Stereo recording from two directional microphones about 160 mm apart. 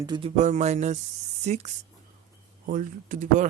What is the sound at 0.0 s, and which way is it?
Speech, 30° right (ahead or behind).